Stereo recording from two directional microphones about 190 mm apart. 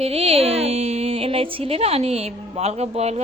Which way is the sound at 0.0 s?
30° right (ahead or behind).